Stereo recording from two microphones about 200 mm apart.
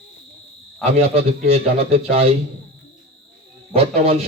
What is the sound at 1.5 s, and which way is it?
Speech, 30° right (ahead or behind).